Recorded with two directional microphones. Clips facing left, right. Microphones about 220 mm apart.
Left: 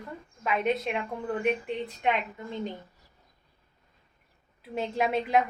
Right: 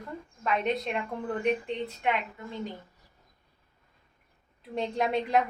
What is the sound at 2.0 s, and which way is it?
Speech, 20° left (ahead or behind).